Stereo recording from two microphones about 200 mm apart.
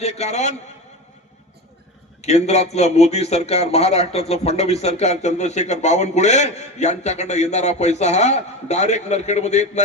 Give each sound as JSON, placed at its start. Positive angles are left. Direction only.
{"t": 0.0, "sound": "speech", "side_deg": 35}
{"t": 2.2, "sound": "speech", "side_deg": 35}